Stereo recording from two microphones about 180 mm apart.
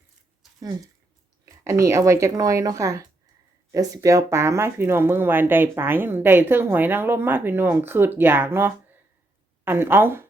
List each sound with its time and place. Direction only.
1.8 s speech: 15° right (ahead or behind)